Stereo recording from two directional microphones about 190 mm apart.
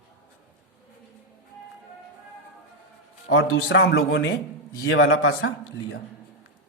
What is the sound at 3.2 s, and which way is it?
A man's voice, 90° left.